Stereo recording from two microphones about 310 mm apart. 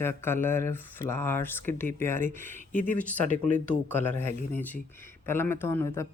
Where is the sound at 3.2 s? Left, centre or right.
Left.